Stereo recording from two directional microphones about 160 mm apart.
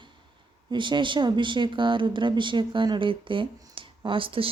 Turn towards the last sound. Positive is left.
turn(degrees=-35)  # may be behind; listen again after turning